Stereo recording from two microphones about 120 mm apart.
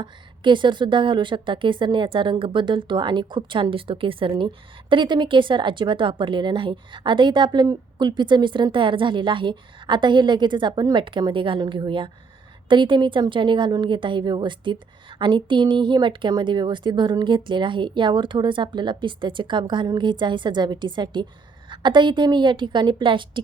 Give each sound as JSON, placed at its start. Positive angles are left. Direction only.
{"t": 0.0, "sound": "a woman's voice", "side_deg": -40}